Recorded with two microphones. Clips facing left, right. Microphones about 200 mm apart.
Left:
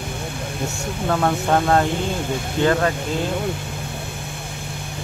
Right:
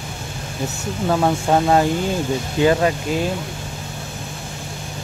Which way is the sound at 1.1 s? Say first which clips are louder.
Right 2 dB; 10° right (ahead or behind).